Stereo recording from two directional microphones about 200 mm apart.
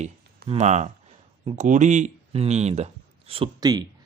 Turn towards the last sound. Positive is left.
turn(degrees=-20)  # may be behind; listen again after turning